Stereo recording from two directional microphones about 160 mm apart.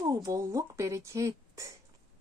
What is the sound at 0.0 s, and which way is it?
Speech, 20° right (ahead or behind).